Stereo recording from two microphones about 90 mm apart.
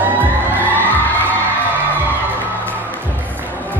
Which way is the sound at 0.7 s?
20° left (ahead or behind).